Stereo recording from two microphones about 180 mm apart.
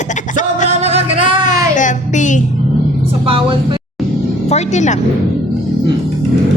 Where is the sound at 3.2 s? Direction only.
30° right (ahead or behind).